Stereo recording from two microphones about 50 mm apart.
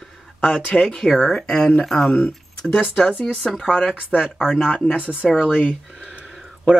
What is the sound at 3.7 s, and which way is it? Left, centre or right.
Speech, left.